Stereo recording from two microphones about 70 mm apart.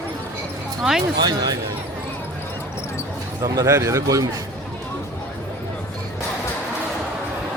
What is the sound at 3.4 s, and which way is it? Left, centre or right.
Speech, right.